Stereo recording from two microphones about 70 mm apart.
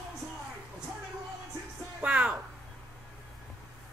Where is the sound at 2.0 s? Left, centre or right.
Centre.